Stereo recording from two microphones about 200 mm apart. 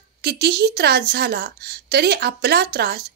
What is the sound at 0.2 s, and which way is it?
A woman's voice, 55° right (ahead or behind).